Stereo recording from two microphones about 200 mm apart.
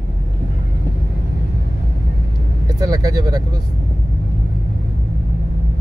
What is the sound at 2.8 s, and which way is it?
Speech, 20° right (ahead or behind).